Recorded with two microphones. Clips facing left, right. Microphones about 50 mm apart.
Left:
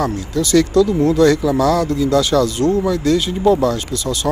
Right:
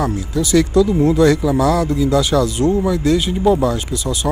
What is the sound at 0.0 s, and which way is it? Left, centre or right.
Speech, right.